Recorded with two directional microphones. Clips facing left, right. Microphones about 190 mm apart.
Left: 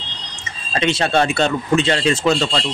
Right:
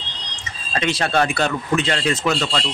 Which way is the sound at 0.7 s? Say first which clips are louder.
Left 2 dB; 25° left (ahead or behind).